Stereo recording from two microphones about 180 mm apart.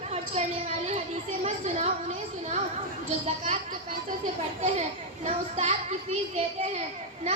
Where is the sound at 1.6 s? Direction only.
40° right (ahead or behind).